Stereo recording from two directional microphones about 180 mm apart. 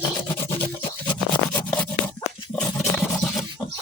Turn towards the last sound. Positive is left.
turn(degrees=5)  # may be behind; listen again after turning